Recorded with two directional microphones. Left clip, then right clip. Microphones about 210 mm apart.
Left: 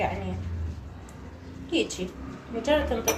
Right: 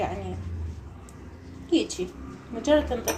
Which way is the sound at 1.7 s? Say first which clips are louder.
Right 2 dB; 40° right (ahead or behind).